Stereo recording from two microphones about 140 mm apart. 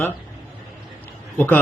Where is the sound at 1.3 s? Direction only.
15° left (ahead or behind).